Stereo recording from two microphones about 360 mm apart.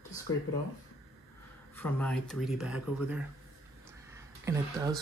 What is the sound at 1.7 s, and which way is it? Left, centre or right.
Speech, centre.